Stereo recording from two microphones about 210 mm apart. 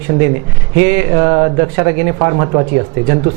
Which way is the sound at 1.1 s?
25° right (ahead or behind).